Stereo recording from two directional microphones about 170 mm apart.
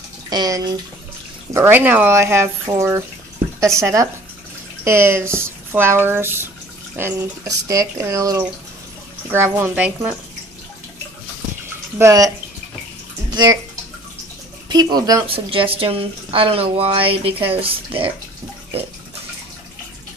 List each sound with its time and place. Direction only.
0.3 s speech: 25° right (ahead or behind)
12.0 s speech: 20° right (ahead or behind)
13.3 s speech: 25° right (ahead or behind)
14.7 s speech: 25° right (ahead or behind)
15.2 s speech: 30° right (ahead or behind)